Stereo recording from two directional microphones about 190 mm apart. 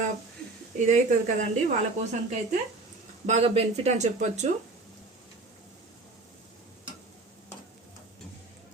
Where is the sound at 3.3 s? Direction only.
35° right (ahead or behind).